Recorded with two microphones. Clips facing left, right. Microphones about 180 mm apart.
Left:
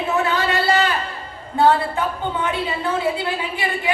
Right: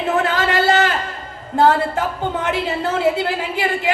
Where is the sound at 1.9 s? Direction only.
90° right.